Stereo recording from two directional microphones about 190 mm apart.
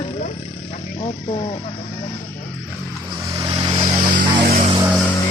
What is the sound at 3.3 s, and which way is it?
Vehicle, 25° right (ahead or behind).